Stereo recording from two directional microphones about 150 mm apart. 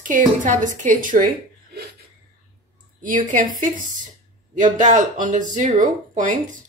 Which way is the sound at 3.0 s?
65° right (ahead or behind).